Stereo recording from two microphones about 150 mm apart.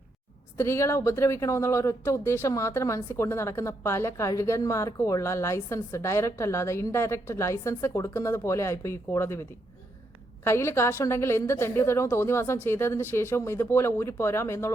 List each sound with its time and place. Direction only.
0.5 s a woman's voice: 15° left (ahead or behind)